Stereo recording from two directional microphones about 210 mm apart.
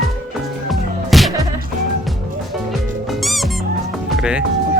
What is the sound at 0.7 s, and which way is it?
Music, centre (ahead or behind).